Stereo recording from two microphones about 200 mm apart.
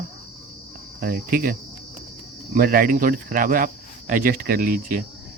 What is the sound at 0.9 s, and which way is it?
Speech, 45° right (ahead or behind).